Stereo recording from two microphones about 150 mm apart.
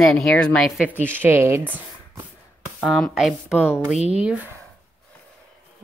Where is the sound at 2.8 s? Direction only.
Centre (ahead or behind).